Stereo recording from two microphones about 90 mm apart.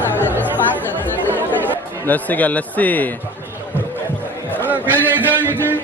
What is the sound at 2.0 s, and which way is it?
A man's voice, 20° left (ahead or behind).